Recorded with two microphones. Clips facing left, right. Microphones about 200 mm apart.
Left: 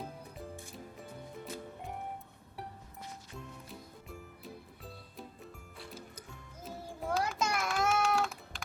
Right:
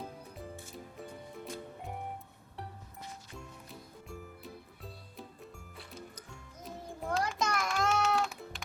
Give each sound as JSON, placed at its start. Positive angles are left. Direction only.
{"t": 0.9, "sound": "music", "side_deg": 0}
{"t": 4.1, "sound": "music", "side_deg": 0}